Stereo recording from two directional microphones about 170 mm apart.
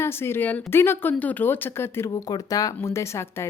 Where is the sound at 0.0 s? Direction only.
15° left (ahead or behind).